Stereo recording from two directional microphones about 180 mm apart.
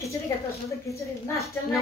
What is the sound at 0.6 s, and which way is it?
Speech, 15° left (ahead or behind).